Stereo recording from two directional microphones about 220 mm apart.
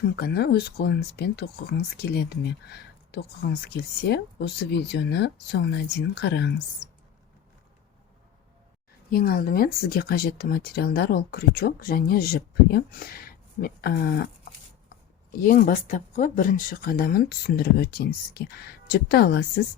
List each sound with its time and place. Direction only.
0.2 s speech: 45° left (ahead or behind)
9.0 s speech: 40° left (ahead or behind)
15.4 s speech: 40° left (ahead or behind)